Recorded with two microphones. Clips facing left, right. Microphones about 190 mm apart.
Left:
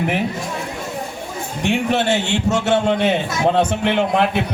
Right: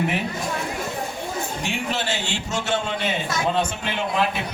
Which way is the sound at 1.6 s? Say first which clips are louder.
Left 12 dB; 65° left (ahead or behind).